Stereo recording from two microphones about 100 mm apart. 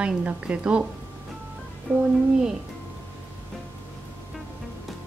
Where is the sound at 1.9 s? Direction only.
10° left (ahead or behind).